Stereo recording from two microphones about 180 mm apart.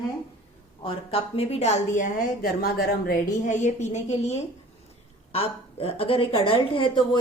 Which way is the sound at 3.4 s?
45° left (ahead or behind).